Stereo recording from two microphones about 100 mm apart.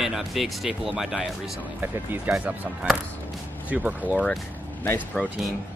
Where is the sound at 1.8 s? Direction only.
20° right (ahead or behind).